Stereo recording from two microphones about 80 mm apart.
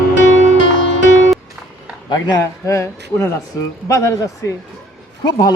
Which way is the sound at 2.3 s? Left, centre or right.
Left.